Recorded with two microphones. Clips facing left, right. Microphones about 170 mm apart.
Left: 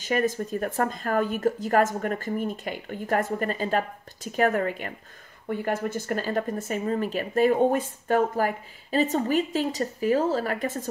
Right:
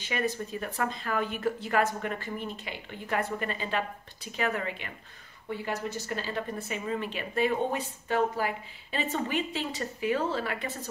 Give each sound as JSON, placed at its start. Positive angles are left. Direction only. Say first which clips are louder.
{"t": 0.0, "sound": "speech", "louder": "left 6 dB", "side_deg": 45}